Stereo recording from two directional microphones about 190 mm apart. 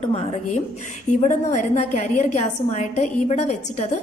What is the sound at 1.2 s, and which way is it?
A woman's voice, 40° left (ahead or behind).